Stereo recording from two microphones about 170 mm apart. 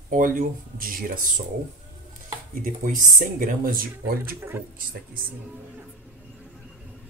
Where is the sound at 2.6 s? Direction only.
50° right (ahead or behind).